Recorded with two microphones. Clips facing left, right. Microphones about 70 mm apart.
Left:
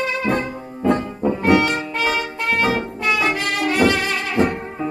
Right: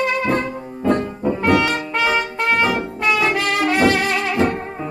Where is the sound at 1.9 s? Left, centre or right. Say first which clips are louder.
Right 3 dB; right.